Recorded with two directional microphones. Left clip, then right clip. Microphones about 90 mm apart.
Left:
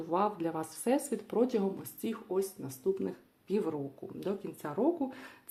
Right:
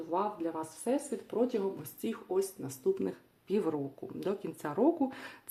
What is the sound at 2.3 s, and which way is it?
Speech, 20° right (ahead or behind).